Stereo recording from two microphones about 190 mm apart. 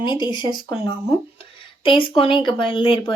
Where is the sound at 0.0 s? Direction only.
25° left (ahead or behind).